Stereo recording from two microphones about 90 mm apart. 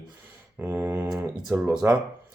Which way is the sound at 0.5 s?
20° right (ahead or behind).